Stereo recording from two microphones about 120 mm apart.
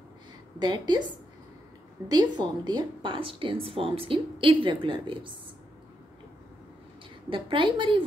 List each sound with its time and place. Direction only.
0.6 s a woman's voice: 35° right (ahead or behind)
2.0 s a woman's voice: 35° right (ahead or behind)
7.2 s a woman's voice: 45° right (ahead or behind)